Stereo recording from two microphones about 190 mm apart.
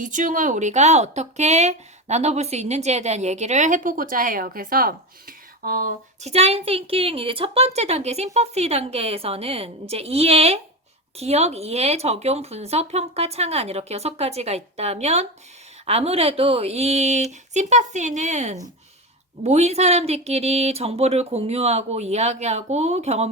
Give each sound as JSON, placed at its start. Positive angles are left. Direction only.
{"t": 0.0, "sound": "a woman's voice", "side_deg": -45}
{"t": 6.3, "sound": "a woman's voice", "side_deg": -35}